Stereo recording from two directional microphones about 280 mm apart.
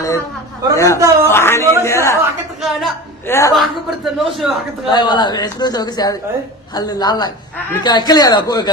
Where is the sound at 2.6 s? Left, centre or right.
Centre.